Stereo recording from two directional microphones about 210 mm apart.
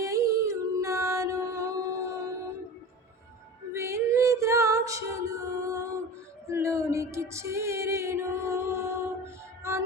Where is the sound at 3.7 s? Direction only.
15° right (ahead or behind).